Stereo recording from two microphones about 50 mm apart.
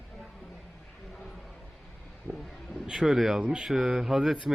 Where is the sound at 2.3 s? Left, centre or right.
Centre.